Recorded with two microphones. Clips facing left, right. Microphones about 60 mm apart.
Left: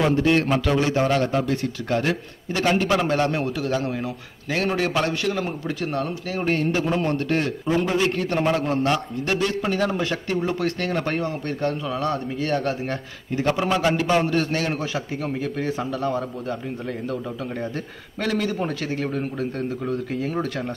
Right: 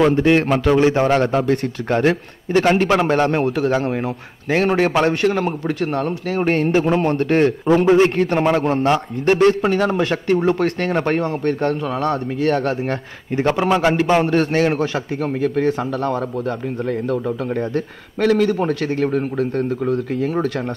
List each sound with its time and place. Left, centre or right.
0.1 s a man's voice: right